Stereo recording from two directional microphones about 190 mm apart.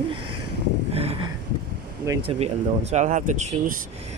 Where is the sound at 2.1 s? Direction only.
15° right (ahead or behind).